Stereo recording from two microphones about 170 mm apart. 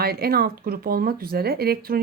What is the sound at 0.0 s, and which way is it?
A woman's voice, 65° right (ahead or behind).